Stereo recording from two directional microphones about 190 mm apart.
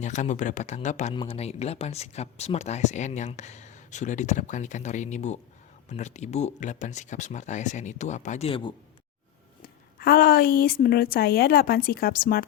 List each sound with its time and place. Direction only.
0.0 s speech: 40° left (ahead or behind)
1.1 s speech: 25° left (ahead or behind)
9.6 s speech: 50° left (ahead or behind)